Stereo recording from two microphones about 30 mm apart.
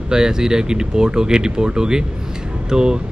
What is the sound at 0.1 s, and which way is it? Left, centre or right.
A man's voice, right.